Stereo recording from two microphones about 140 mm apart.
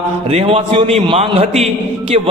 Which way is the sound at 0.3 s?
45° right (ahead or behind).